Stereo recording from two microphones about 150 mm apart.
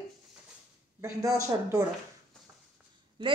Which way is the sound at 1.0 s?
20° right (ahead or behind).